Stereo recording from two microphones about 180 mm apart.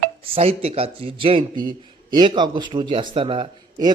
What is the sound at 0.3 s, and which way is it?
Speech, 35° right (ahead or behind).